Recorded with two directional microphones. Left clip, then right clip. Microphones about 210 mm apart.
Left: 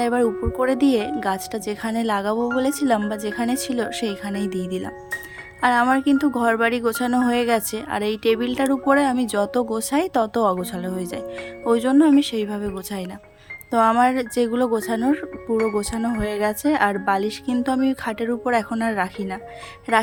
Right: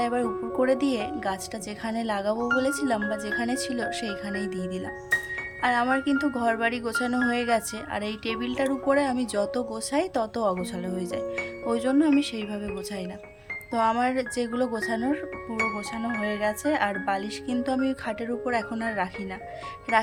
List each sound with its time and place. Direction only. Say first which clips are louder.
0.0 s speech: left 6 dB; 20° left (ahead or behind)